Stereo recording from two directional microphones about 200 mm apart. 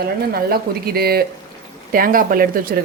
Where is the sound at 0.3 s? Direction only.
50° right (ahead or behind).